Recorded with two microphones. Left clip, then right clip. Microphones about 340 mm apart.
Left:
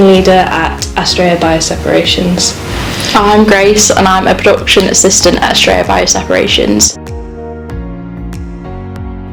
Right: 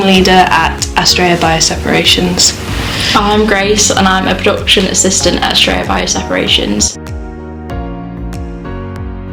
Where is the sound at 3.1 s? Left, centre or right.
Left.